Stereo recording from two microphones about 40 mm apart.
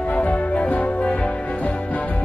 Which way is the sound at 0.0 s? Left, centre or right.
Left.